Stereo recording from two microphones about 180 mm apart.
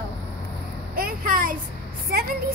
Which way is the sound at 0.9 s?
55° right (ahead or behind).